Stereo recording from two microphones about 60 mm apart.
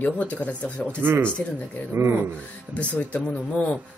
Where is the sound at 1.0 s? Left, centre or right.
Right.